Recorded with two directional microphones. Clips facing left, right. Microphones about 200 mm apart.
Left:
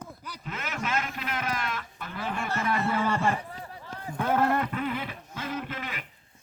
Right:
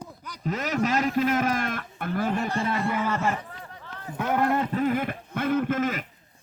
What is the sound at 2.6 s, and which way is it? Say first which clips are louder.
Speech: right 2 dB; 25° right (ahead or behind).